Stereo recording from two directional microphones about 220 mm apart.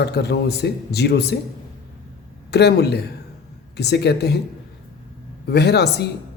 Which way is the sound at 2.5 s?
50° left (ahead or behind).